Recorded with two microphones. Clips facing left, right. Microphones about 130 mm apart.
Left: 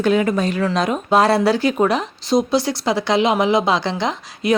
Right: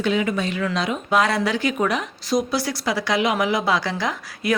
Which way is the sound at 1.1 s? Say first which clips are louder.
Left 5 dB; 30° left (ahead or behind).